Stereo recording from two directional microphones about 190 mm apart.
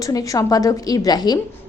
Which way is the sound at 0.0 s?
20° left (ahead or behind).